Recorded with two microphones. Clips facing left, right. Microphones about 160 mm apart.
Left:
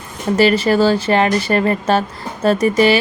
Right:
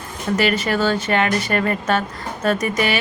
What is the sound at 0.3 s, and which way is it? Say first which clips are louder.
A woman's voice: left 7 dB; 30° left (ahead or behind).